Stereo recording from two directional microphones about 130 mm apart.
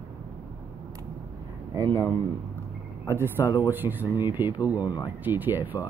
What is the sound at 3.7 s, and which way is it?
Speech, 15° right (ahead or behind).